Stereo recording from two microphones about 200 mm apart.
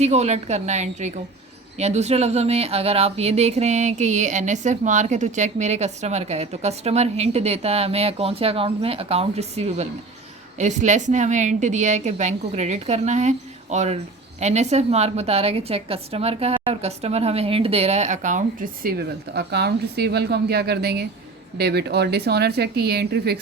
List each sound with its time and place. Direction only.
0.0 s a woman's voice: 35° right (ahead or behind); by 23.4 s 55° right (ahead or behind)